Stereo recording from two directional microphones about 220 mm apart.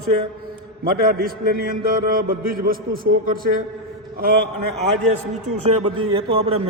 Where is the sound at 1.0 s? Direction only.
40° right (ahead or behind).